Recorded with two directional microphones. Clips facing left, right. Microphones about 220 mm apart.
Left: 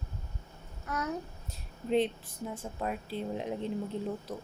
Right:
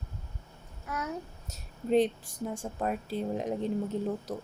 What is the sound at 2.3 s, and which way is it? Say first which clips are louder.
Speech: right 3 dB; 80° right.